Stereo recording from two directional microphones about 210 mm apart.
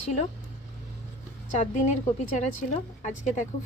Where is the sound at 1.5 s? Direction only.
35° left (ahead or behind).